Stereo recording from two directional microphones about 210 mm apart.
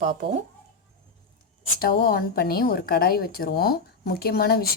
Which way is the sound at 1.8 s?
45° left (ahead or behind).